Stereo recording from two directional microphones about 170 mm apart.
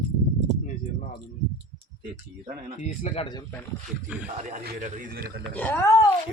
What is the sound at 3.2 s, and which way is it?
Speech, 25° left (ahead or behind).